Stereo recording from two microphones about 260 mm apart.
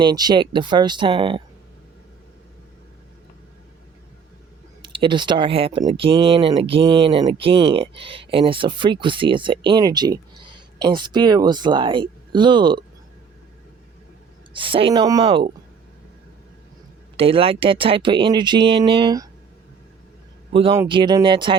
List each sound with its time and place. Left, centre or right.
0.0 s speech: centre
4.8 s speech: centre
14.5 s speech: centre
17.2 s speech: right
20.5 s speech: centre